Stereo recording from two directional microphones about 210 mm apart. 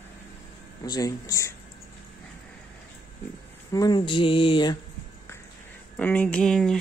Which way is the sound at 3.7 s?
20° left (ahead or behind).